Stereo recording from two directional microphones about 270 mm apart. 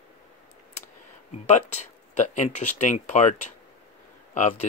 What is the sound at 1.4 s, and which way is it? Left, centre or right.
Speech, left.